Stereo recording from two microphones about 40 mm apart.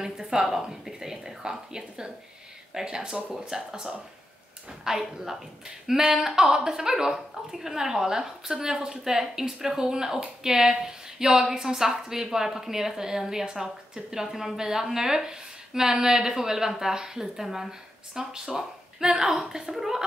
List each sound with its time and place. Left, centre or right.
0.0 s a woman's voice: centre